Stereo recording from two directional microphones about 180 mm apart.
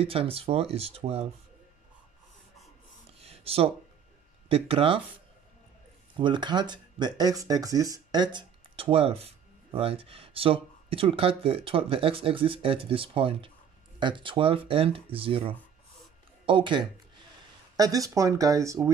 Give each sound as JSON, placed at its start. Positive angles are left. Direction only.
{"t": 0.0, "sound": "speech", "side_deg": -30}
{"t": 3.2, "sound": "a sound", "side_deg": -35}
{"t": 4.5, "sound": "speech", "side_deg": -30}
{"t": 6.1, "sound": "speech", "side_deg": -25}